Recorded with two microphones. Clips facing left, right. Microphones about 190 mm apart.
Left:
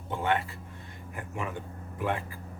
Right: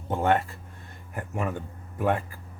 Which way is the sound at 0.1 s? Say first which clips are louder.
Right 5 dB; 45° right (ahead or behind).